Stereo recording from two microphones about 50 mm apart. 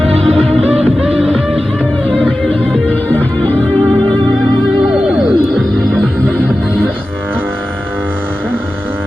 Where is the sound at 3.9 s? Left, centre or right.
Centre.